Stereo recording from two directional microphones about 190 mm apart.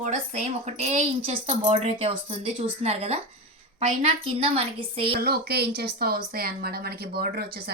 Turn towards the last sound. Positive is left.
turn(degrees=-55)  # may be behind; listen again after turning